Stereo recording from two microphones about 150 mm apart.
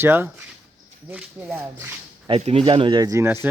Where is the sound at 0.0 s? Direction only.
15° right (ahead or behind).